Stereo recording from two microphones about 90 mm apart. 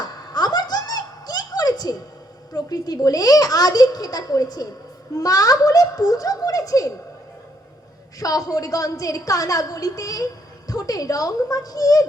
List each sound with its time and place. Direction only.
0.0 s a sound: 50° left (ahead or behind)
2.5 s a woman's voice: 45° left (ahead or behind)
8.2 s a woman's voice: 40° left (ahead or behind)